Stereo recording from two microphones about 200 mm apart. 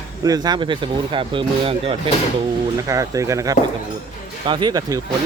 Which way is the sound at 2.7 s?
15° right (ahead or behind).